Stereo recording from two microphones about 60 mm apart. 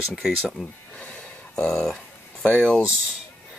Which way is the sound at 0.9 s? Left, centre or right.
Left.